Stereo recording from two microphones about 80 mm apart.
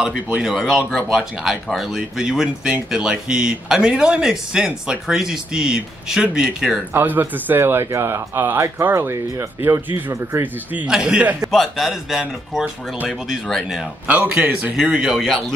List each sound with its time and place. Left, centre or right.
0.0 s speech: centre
6.9 s speech: right
10.9 s speech: centre
11.5 s speech: centre
14.0 s speech: centre